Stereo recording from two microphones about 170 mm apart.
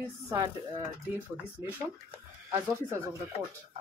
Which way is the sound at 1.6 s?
20° left (ahead or behind).